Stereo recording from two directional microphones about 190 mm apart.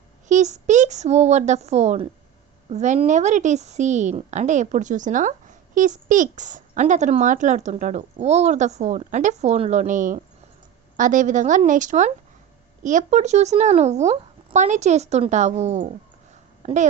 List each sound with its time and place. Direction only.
0.3 s a woman's voice: 40° right (ahead or behind)